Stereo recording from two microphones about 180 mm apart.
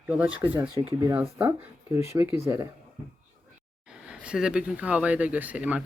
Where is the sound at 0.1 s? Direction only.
10° right (ahead or behind).